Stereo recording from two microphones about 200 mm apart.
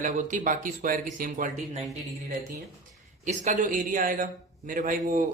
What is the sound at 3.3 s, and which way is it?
Speech, 35° right (ahead or behind).